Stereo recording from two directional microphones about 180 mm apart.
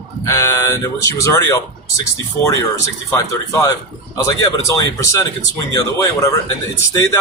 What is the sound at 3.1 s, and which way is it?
Speech, 15° left (ahead or behind).